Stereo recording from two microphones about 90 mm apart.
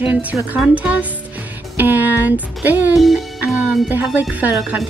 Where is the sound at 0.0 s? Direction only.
20° right (ahead or behind).